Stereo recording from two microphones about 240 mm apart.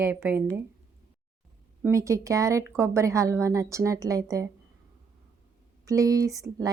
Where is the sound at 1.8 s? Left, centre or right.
Centre.